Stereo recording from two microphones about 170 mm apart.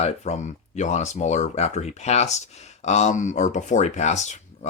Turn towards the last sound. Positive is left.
turn(degrees=45)  # may be behind; listen again after turning